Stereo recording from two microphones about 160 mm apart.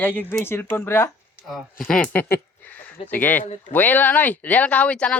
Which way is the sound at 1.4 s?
Centre (ahead or behind).